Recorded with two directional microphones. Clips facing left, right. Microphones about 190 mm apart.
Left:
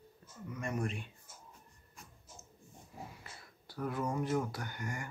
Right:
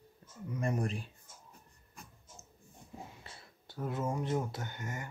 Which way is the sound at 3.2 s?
25° right (ahead or behind).